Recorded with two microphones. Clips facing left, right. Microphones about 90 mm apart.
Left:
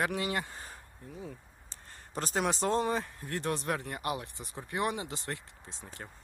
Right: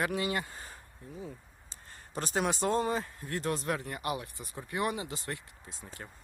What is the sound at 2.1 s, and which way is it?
Speech, 45° left (ahead or behind).